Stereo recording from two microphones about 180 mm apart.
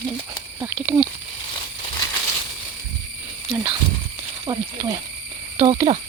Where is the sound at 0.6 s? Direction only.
10° right (ahead or behind).